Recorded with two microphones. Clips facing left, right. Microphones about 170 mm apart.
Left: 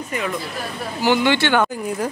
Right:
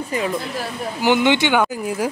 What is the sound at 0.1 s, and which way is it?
Speech, 30° right (ahead or behind).